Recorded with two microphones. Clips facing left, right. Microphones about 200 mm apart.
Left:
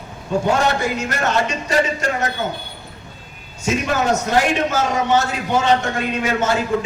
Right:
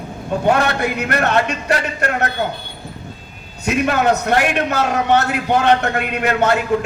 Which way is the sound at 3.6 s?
60° right (ahead or behind).